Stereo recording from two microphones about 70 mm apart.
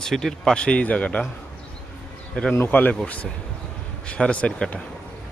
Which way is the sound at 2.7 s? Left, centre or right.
Left.